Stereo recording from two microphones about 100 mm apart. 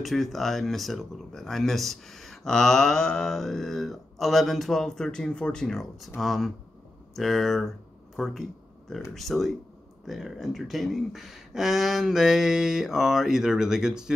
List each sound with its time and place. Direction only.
0.0 s speech: centre (ahead or behind)